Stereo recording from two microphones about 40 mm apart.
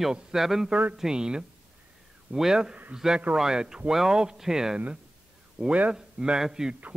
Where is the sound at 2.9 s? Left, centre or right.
Right.